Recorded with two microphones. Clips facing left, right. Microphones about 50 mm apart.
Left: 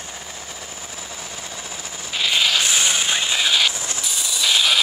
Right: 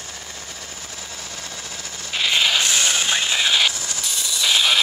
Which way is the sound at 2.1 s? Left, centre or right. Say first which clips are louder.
Even; centre.